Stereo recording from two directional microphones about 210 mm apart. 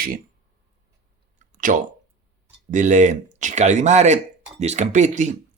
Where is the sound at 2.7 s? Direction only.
35° right (ahead or behind).